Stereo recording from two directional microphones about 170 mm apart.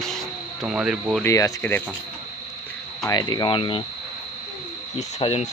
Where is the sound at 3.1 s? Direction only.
25° left (ahead or behind).